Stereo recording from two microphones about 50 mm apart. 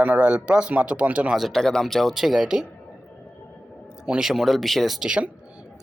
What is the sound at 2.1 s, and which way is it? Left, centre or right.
Speech, centre.